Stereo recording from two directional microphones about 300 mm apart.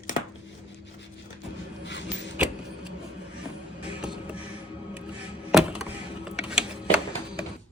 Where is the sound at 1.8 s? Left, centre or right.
Left.